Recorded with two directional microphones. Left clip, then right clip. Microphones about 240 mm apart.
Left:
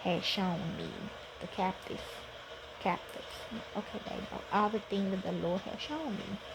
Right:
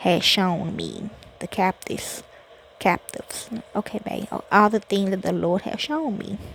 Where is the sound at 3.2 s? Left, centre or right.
Right.